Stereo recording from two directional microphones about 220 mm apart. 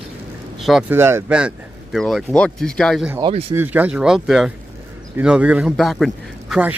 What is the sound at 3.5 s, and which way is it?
Speech, 10° right (ahead or behind).